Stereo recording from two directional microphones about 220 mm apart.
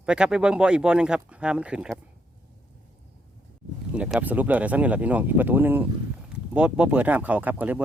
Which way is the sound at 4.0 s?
5° right (ahead or behind).